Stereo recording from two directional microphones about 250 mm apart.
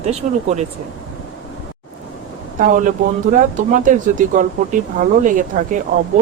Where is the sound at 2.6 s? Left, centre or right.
Right.